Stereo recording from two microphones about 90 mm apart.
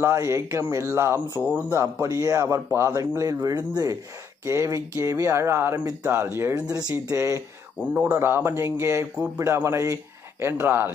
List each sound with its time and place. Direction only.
0.0 s speech: 30° right (ahead or behind)
1.4 s speech: 15° right (ahead or behind)
1.7 s speech: 35° right (ahead or behind)
3.2 s speech: 40° right (ahead or behind)
4.5 s speech: 35° right (ahead or behind)
6.5 s speech: 45° right (ahead or behind)
7.2 s speech: 30° right (ahead or behind)